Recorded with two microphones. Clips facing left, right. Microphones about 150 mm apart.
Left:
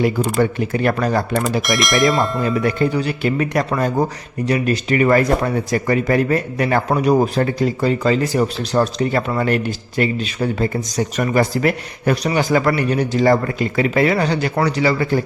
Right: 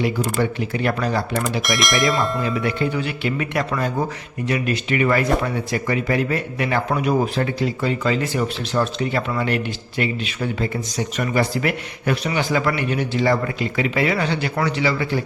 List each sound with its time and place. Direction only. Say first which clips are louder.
0.0 s speech: left 4 dB; 45° left (ahead or behind)
1.6 s speech: left 3 dB; centre (ahead or behind)
2.4 s speech: left 4 dB; 45° left (ahead or behind)